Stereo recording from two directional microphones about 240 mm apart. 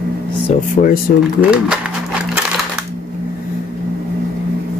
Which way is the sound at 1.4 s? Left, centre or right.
Centre.